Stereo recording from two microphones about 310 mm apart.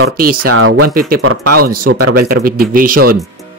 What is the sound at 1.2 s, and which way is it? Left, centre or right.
Speech, right.